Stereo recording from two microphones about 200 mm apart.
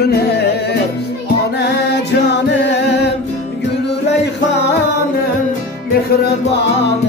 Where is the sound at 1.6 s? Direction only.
60° left (ahead or behind).